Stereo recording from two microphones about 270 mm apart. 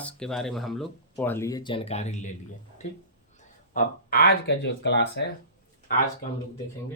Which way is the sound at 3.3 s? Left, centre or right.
Left.